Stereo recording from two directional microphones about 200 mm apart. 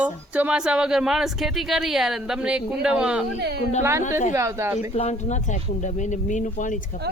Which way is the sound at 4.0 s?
40° left (ahead or behind).